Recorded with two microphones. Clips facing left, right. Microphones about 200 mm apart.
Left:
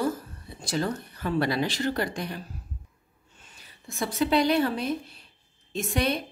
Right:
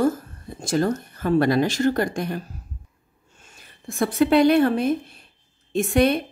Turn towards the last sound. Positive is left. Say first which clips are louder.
# right 8 dB
turn(degrees=-55)  # may be behind; listen again after turning